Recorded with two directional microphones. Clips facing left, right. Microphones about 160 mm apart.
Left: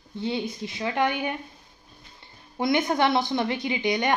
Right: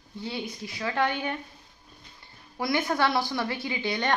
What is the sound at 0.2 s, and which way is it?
Speech, 20° left (ahead or behind).